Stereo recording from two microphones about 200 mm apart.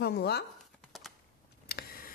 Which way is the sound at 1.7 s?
45° left (ahead or behind).